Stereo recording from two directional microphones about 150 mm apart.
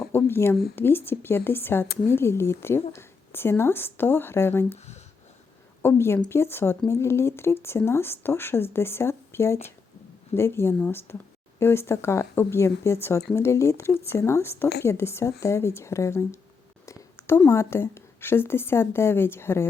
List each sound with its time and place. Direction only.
0.0 s a sound: 15° left (ahead or behind)
0.8 s speech: 15° left (ahead or behind)
5.8 s a woman's voice: 15° left (ahead or behind)